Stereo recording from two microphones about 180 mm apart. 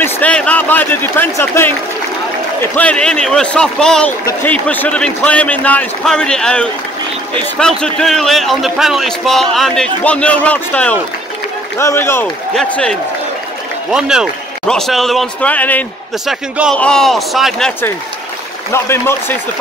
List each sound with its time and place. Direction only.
0.0 s a sound: 5° left (ahead or behind)
1.4 s a man's voice: 10° left (ahead or behind)
13.9 s a man's voice: 5° right (ahead or behind)
16.3 s a man's voice: centre (ahead or behind); by 19.3 s 15° left (ahead or behind)